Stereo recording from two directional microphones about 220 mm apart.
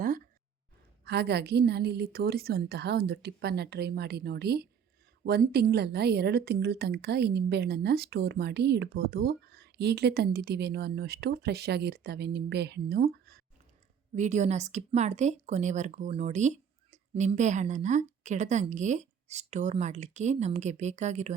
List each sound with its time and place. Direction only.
1.0 s speech: 50° right (ahead or behind)
14.2 s speech: 30° right (ahead or behind)